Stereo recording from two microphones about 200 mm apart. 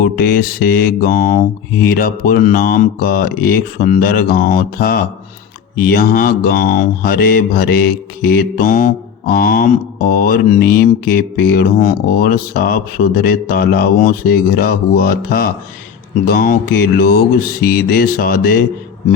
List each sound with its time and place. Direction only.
0.0 s speech: 50° left (ahead or behind)